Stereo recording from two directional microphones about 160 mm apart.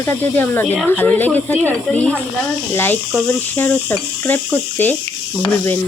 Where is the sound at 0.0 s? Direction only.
15° left (ahead or behind).